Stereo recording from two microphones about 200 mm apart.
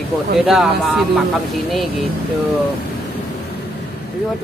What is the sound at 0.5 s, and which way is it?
Speech, centre (ahead or behind).